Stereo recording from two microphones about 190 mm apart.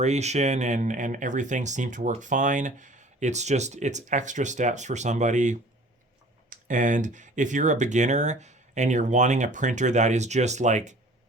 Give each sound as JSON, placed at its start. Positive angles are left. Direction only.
{"t": 0.0, "sound": "speech", "side_deg": -35}